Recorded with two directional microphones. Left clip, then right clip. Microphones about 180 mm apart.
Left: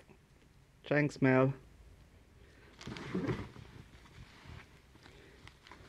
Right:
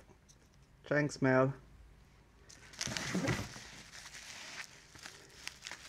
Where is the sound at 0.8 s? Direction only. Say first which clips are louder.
Left 1 dB; 5° right (ahead or behind).